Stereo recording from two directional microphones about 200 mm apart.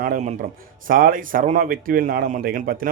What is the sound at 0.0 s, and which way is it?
Speech, 40° right (ahead or behind).